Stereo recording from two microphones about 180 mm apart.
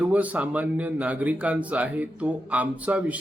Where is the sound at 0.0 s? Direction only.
10° right (ahead or behind).